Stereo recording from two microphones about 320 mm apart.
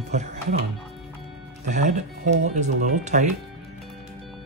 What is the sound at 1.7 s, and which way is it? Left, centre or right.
Speech, right.